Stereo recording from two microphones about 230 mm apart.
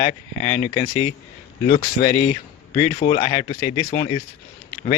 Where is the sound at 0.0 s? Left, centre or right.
Left.